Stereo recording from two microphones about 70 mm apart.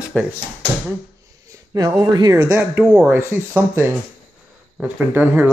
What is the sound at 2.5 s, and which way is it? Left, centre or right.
Speech, right.